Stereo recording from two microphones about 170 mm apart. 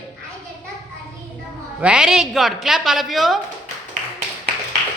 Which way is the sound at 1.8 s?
5° right (ahead or behind).